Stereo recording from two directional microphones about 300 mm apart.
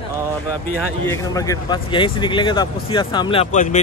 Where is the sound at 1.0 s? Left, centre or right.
Centre.